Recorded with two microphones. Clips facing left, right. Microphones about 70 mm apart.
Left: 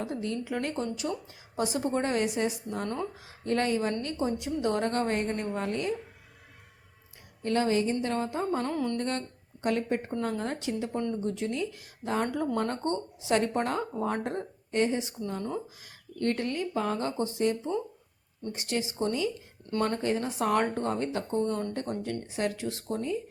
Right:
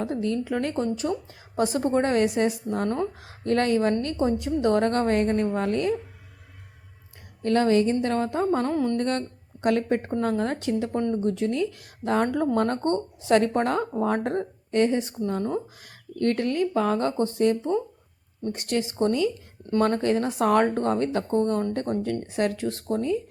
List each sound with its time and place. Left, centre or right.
0.0 s a woman's voice: right
3.2 s a woman's voice: right
4.0 s a woman's voice: right
7.4 s a woman's voice: right
9.0 s speech: right
10.1 s a woman's voice: right